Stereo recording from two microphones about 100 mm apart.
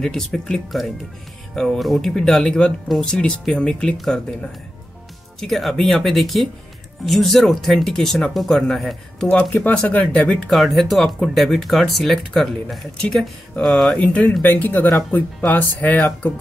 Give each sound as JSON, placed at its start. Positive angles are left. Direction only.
{"t": 0.0, "sound": "speech", "side_deg": 5}
{"t": 13.9, "sound": "speech", "side_deg": 15}